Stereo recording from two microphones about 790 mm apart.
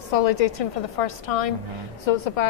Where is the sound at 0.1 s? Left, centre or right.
Left.